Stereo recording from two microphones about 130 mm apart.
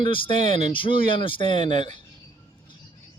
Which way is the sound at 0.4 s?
60° right (ahead or behind).